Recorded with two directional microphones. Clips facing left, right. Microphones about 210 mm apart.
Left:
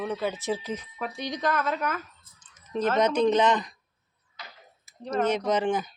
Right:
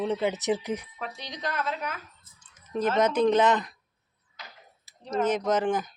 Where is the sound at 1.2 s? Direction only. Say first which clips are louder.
Left 5 dB; 50° left (ahead or behind).